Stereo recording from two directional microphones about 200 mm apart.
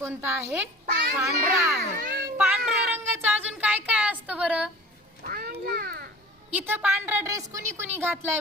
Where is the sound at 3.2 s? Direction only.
10° right (ahead or behind).